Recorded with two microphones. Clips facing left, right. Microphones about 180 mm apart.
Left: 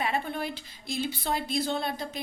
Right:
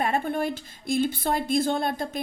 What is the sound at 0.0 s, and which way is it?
Speech, 50° right (ahead or behind).